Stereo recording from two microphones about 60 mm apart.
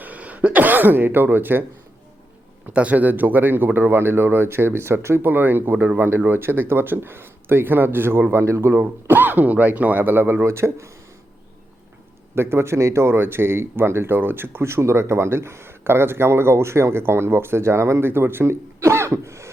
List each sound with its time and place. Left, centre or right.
0.0 s throat clearing: right
2.7 s speech: right
8.7 s speech: right
12.3 s speech: right
18.1 s speech: right
18.8 s cough: right